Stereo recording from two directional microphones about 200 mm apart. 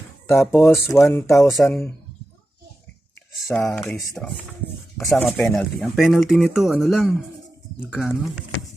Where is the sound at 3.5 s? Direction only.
5° left (ahead or behind).